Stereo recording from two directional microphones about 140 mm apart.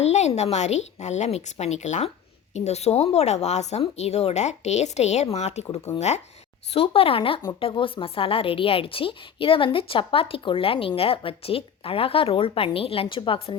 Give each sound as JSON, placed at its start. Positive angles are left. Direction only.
{"t": 0.0, "sound": "a woman's voice", "side_deg": 50}